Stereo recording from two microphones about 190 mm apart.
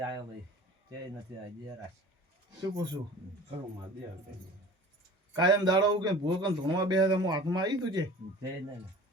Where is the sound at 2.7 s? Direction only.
25° right (ahead or behind).